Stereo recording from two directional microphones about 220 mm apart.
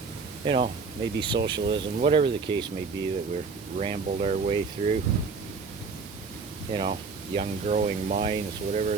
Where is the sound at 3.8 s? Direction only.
30° right (ahead or behind).